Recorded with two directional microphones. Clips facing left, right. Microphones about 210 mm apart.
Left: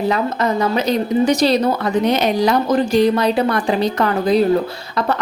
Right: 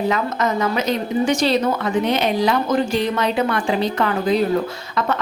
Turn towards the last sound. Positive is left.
turn(degrees=35)  # may be behind; listen again after turning